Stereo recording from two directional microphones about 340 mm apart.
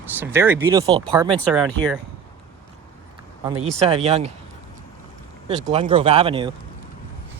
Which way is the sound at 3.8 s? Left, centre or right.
Centre.